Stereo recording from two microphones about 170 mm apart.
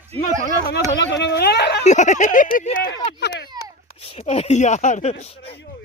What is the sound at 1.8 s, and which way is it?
Speech, 45° left (ahead or behind).